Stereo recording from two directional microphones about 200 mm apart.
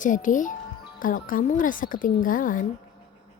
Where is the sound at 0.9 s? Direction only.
45° left (ahead or behind).